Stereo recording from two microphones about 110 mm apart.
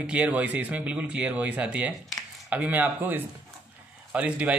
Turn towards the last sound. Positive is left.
turn(degrees=-10)  # may be behind; listen again after turning